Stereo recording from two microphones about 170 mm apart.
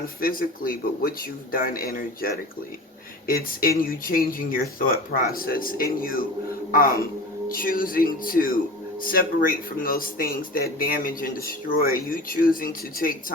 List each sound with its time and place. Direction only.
0.0 s speech: 60° left (ahead or behind)